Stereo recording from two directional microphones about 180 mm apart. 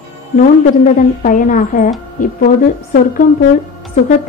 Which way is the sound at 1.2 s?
45° left (ahead or behind).